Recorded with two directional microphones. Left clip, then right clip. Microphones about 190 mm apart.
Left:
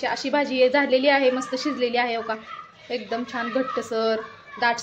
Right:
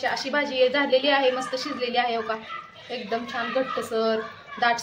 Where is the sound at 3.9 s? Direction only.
40° left (ahead or behind).